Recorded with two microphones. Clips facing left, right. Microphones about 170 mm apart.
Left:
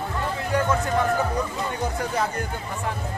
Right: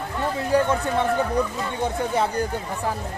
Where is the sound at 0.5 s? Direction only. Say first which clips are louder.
Right 4 dB; 35° right (ahead or behind).